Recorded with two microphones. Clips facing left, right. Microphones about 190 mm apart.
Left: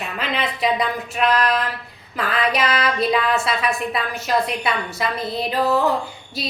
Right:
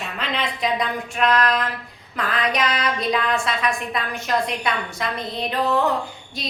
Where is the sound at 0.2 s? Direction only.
5° left (ahead or behind).